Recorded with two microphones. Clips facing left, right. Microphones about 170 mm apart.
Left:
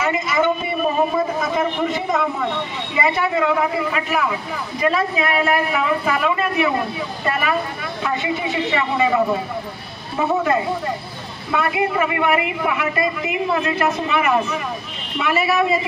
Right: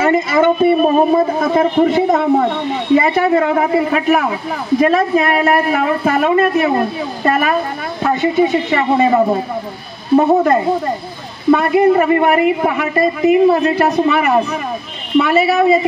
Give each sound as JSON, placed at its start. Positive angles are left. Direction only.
{"t": 0.0, "sound": "a man's voice", "side_deg": -55}